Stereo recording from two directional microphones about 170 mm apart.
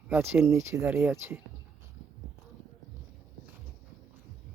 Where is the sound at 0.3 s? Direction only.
15° right (ahead or behind).